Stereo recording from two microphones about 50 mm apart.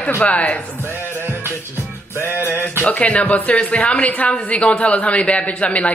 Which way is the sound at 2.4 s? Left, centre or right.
Left.